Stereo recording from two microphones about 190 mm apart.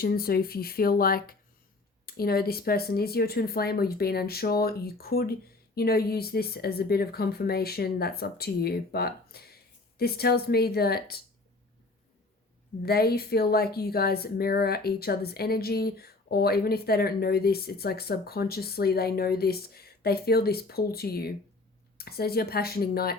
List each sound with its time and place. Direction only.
0.0 s speech: 50° left (ahead or behind)
12.8 s speech: 55° left (ahead or behind)